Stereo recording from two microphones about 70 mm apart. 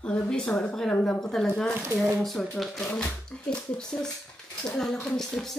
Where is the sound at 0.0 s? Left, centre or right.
Centre.